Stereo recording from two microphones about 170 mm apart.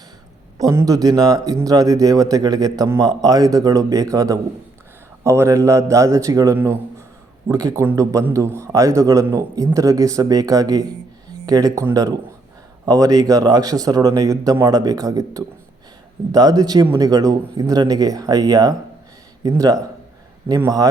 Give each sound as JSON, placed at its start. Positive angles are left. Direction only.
{"t": 0.6, "sound": "a man's voice", "side_deg": -20}